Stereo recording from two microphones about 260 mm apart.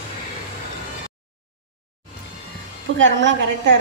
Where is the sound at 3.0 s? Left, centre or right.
Right.